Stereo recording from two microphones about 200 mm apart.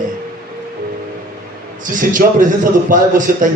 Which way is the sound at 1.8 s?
40° right (ahead or behind).